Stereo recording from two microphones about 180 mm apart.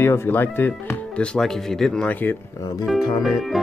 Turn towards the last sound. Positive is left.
turn(degrees=0)  # may be behind; listen again after turning